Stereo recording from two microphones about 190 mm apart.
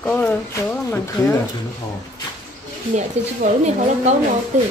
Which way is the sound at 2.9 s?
40° right (ahead or behind).